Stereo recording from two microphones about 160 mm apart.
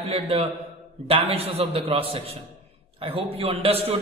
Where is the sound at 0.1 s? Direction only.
40° right (ahead or behind).